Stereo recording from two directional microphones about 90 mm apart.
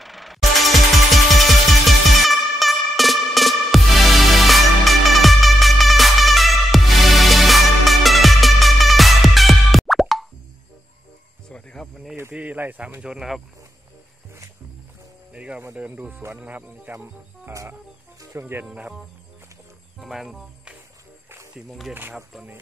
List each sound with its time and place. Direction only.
0.0 s music: centre (ahead or behind)
11.4 s cricket: 5° left (ahead or behind)
12.2 s speech: 20° right (ahead or behind)
15.3 s music: 15° right (ahead or behind)
15.7 s speech: 15° right (ahead or behind)
17.5 s music: 35° right (ahead or behind)
18.4 s speech: 25° right (ahead or behind)
20.0 s speech: centre (ahead or behind)